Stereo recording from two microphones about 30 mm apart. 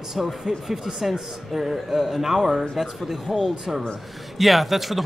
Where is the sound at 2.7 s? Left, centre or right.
Centre.